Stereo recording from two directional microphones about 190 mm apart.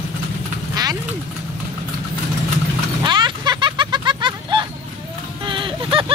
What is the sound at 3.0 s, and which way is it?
Vehicle, 25° right (ahead or behind).